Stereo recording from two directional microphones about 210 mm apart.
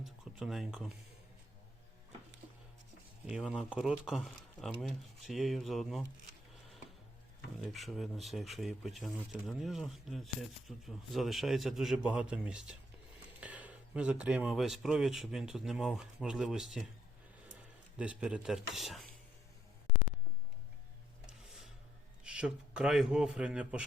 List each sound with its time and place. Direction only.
0.0 s a sound: centre (ahead or behind)
3.2 s speech: 5° right (ahead or behind)
7.6 s speech: centre (ahead or behind)
17.9 s speech: 5° right (ahead or behind)
21.2 s a sound: centre (ahead or behind)
22.2 s speech: 5° right (ahead or behind)